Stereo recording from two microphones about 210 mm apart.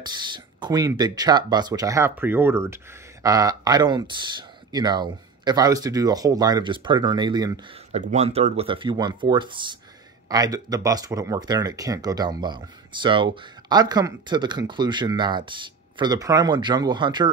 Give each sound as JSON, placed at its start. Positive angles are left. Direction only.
{"t": 0.0, "sound": "speech", "side_deg": -20}
{"t": 7.9, "sound": "speech", "side_deg": -35}